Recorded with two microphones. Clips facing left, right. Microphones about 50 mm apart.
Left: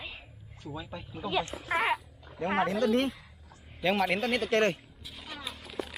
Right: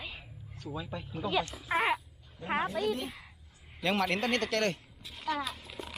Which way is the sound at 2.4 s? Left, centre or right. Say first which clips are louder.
Left 4 dB; left.